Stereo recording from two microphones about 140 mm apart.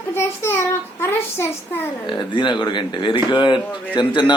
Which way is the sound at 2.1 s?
35° left (ahead or behind).